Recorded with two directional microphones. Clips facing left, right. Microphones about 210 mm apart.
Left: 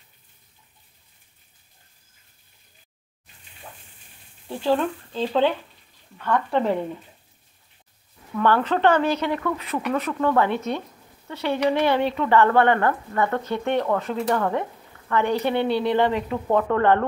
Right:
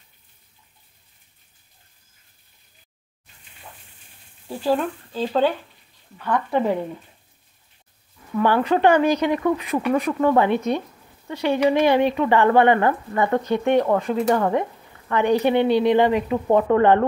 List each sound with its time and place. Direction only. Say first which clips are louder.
4.5 s speech: even; 10° right (ahead or behind)
8.4 s speech: right 2 dB; 10° right (ahead or behind)